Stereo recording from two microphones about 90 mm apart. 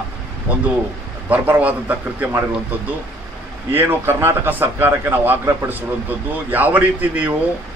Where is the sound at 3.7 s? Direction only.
25° right (ahead or behind).